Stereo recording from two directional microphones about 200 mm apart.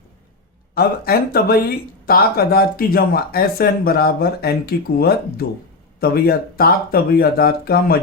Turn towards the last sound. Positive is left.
turn(degrees=50)  # may be behind; listen again after turning